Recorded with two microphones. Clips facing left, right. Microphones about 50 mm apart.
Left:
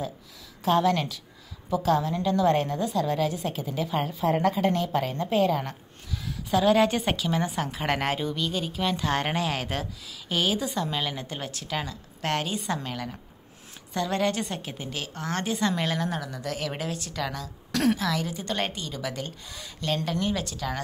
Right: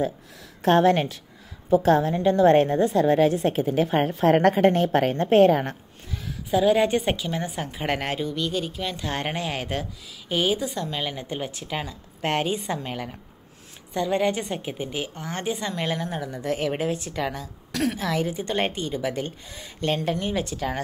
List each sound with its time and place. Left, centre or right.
0.6 s a woman's voice: right
4.2 s a woman's voice: right
4.6 s a woman's voice: right
6.5 s a woman's voice: centre; by 13.1 s right
13.9 s a woman's voice: centre
16.3 s a woman's voice: right